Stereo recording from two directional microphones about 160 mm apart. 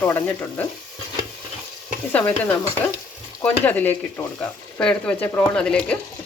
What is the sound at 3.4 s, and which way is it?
Speech, 10° left (ahead or behind).